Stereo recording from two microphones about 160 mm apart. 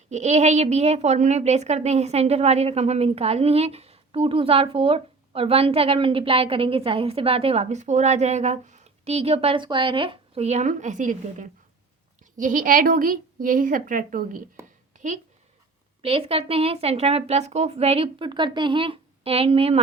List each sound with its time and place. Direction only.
0.1 s a woman's voice: 45° right (ahead or behind)
14.9 s a sound: 50° right (ahead or behind)
16.0 s a woman's voice: 35° right (ahead or behind)